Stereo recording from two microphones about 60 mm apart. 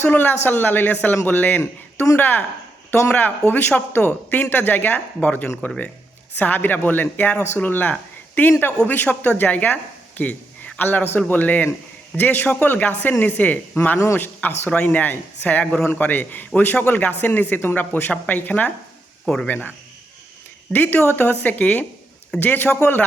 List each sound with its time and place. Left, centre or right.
0.0 s speech: left
6.3 s speech: left
10.2 s a sound: left
10.8 s speech: left
20.7 s speech: left